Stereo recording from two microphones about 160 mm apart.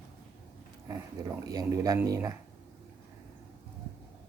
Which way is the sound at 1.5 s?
20° right (ahead or behind).